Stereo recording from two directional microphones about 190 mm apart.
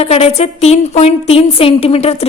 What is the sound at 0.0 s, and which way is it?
A woman's voice, 35° left (ahead or behind).